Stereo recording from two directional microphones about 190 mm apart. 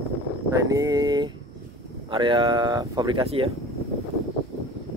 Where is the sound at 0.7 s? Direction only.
20° right (ahead or behind).